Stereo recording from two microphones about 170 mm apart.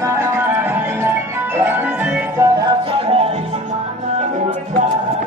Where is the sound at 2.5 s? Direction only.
25° right (ahead or behind).